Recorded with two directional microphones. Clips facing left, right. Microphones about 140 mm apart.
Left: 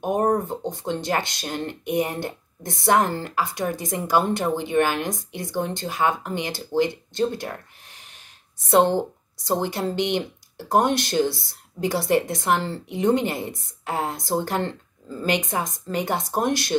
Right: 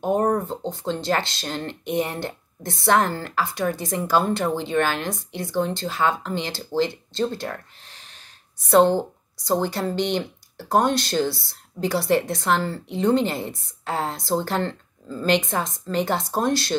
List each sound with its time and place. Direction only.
0.0 s speech: 15° left (ahead or behind)